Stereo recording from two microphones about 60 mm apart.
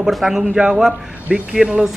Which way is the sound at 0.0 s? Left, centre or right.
Centre.